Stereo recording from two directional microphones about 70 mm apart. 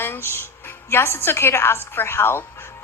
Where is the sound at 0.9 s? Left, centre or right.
Left.